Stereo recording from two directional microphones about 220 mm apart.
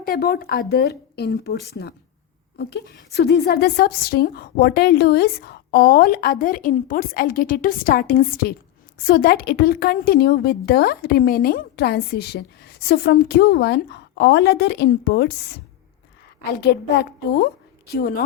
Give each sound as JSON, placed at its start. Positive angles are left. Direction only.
{"t": 0.0, "sound": "a woman's voice", "side_deg": 40}
{"t": 16.5, "sound": "a woman's voice", "side_deg": 45}